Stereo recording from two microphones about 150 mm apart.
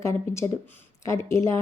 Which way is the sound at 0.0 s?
20° left (ahead or behind).